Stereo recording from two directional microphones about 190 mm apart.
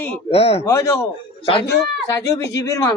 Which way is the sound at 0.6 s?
15° left (ahead or behind).